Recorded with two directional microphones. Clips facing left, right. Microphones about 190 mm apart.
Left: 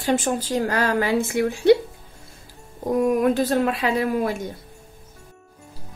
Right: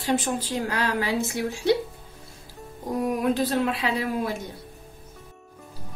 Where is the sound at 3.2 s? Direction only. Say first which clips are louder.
Left 4 dB; 45° left (ahead or behind).